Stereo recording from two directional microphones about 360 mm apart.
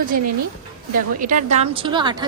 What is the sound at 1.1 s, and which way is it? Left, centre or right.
A woman's voice, right.